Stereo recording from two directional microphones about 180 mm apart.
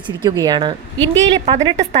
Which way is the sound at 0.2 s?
25° right (ahead or behind).